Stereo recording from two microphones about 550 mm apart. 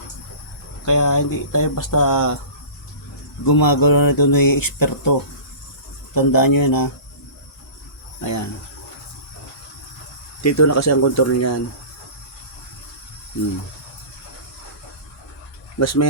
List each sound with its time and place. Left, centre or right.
0.9 s speech: left
3.4 s speech: left
6.1 s speech: left
8.2 s speech: left
10.4 s speech: left
15.8 s speech: left